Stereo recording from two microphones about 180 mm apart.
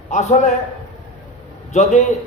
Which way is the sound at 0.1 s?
40° left (ahead or behind).